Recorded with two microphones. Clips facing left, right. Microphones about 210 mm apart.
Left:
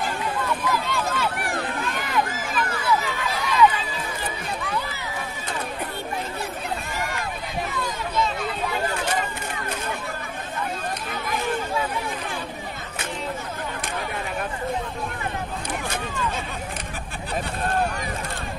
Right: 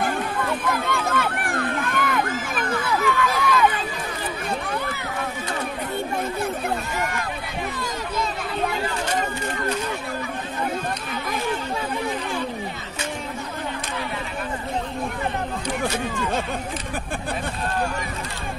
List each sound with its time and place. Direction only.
0.0 s run: 55° right (ahead or behind)